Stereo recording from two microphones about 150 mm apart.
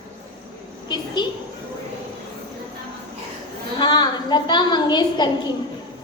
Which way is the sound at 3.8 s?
30° left (ahead or behind).